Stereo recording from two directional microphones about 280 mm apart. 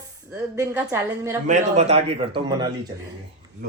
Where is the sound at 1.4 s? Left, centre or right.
Right.